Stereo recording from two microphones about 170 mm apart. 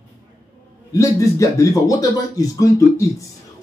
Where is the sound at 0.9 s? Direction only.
20° left (ahead or behind).